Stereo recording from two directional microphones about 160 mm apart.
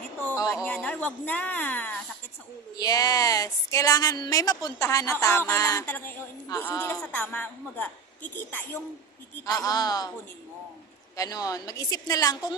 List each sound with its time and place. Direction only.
0.5 s speech: 5° left (ahead or behind)
2.7 s a woman's voice: 25° left (ahead or behind)
9.5 s speech: 20° left (ahead or behind)
11.2 s speech: 20° left (ahead or behind)